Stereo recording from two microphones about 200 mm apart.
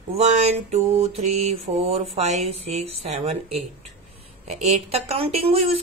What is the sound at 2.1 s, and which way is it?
Speech, 35° right (ahead or behind).